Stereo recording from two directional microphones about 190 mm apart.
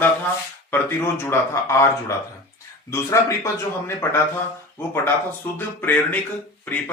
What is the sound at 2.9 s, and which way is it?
A man's voice, 15° left (ahead or behind).